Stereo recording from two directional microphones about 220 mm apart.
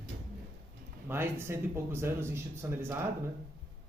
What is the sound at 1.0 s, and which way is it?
Speech, 10° right (ahead or behind).